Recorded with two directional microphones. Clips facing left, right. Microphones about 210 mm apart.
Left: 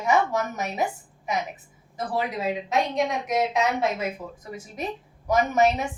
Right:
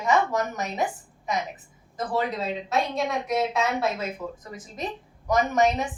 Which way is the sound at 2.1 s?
10° left (ahead or behind).